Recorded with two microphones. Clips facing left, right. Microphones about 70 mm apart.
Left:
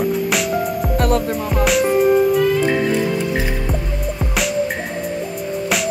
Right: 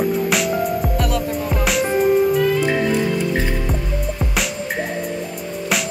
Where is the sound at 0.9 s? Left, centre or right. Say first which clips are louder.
Left 4 dB; left.